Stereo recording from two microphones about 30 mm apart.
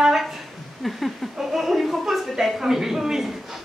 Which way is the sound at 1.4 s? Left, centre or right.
Centre.